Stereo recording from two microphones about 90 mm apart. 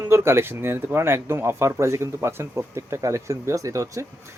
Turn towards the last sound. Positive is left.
turn(degrees=-35)  # may be behind; listen again after turning